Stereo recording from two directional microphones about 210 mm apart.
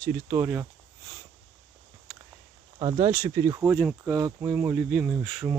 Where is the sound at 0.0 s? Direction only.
10° right (ahead or behind).